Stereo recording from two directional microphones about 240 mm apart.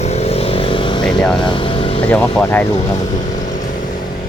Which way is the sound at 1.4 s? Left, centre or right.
Left.